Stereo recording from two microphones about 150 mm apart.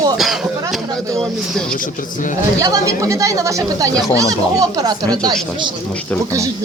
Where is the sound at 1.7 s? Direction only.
60° left (ahead or behind).